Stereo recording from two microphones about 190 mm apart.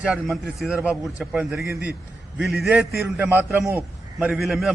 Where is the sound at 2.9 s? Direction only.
55° right (ahead or behind).